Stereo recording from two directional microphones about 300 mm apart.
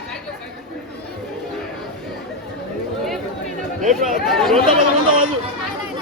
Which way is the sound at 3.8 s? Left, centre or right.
Right.